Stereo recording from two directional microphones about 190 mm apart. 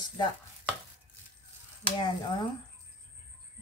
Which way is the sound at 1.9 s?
20° left (ahead or behind).